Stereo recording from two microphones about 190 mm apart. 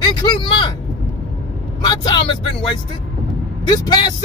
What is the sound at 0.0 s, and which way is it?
Vehicle, 25° left (ahead or behind).